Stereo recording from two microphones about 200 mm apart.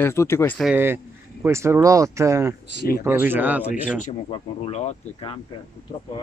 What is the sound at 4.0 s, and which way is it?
Speech, 30° left (ahead or behind).